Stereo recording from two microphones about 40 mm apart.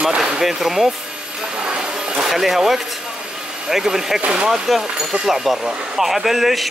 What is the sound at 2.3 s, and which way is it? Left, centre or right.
Speech, centre.